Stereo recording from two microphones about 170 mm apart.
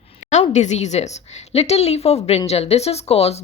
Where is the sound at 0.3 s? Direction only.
40° left (ahead or behind).